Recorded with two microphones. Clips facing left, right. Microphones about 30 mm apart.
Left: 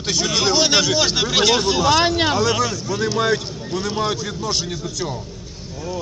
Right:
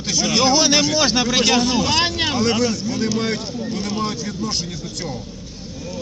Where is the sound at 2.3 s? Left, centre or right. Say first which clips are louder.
Left 1 dB; right.